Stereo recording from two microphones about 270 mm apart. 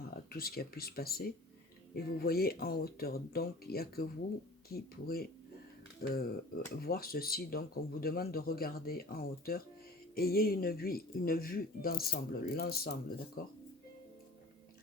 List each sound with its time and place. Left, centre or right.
0.0 s speech: left